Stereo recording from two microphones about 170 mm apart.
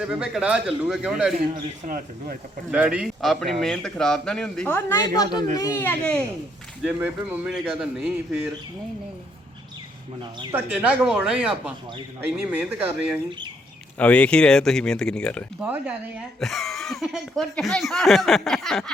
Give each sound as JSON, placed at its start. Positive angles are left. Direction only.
{"t": 0.0, "sound": "speech", "side_deg": -5}
{"t": 1.8, "sound": "speech", "side_deg": -50}
{"t": 2.7, "sound": "speech", "side_deg": -5}
{"t": 6.8, "sound": "speech", "side_deg": -10}
{"t": 10.5, "sound": "speech", "side_deg": -10}
{"t": 14.0, "sound": "speech", "side_deg": 5}
{"t": 15.6, "sound": "speech", "side_deg": -5}